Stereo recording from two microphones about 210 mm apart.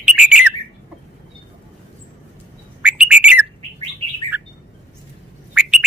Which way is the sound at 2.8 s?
5° right (ahead or behind).